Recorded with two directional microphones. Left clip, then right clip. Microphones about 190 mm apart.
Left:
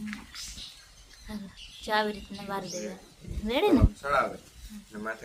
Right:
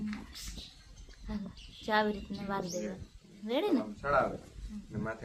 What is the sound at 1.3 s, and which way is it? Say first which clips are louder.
Speech: left 2 dB; 5° left (ahead or behind).